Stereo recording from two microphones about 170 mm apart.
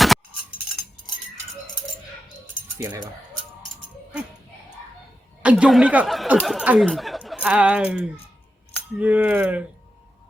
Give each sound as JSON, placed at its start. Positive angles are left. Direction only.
{"t": 2.7, "sound": "speech", "side_deg": -25}
{"t": 5.4, "sound": "speech", "side_deg": -5}